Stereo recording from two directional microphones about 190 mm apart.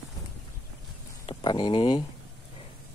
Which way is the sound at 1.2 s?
25° left (ahead or behind).